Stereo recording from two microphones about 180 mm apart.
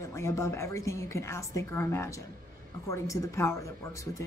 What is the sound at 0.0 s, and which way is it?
Speech, 15° left (ahead or behind).